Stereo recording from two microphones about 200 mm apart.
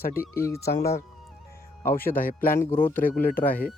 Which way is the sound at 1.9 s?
45° left (ahead or behind).